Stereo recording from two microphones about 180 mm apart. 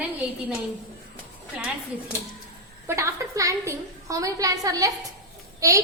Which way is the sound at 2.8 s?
15° right (ahead or behind).